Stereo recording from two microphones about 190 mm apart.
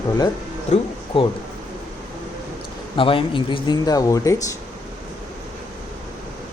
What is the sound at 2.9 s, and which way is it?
Speech, 30° left (ahead or behind).